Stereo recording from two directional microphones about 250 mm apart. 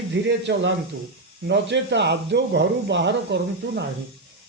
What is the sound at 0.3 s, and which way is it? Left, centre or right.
A man's voice, right.